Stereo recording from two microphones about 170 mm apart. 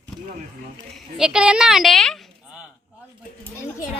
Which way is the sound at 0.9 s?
5° right (ahead or behind).